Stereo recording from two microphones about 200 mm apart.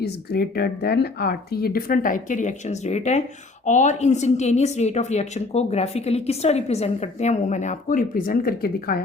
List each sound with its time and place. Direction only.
0.0 s speech: 50° left (ahead or behind)